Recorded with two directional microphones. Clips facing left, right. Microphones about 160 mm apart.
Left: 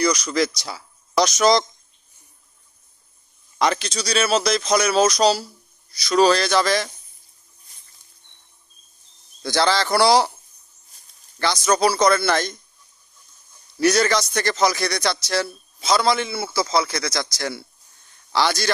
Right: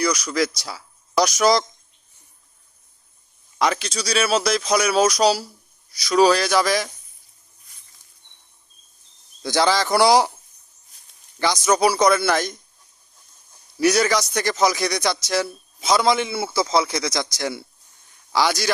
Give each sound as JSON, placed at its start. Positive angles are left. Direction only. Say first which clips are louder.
{"t": 0.0, "sound": "speech", "louder": "left 1 dB", "side_deg": -5}
{"t": 3.6, "sound": "a man's voice", "louder": "left 1 dB", "side_deg": -5}
{"t": 9.4, "sound": "a man's voice", "louder": "right 1 dB", "side_deg": -15}
{"t": 11.3, "sound": "a man's voice", "louder": "right 1 dB", "side_deg": -15}
{"t": 13.7, "sound": "a man's voice", "louder": "even", "side_deg": -10}